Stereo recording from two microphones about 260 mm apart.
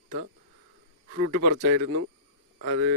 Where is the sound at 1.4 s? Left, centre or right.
Right.